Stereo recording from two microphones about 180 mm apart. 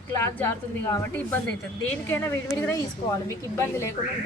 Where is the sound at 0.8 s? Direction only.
15° left (ahead or behind).